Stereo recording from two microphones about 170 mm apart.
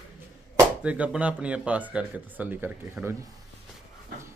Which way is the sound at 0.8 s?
10° right (ahead or behind).